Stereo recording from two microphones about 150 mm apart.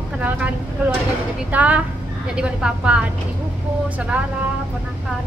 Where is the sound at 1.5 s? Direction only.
10° right (ahead or behind).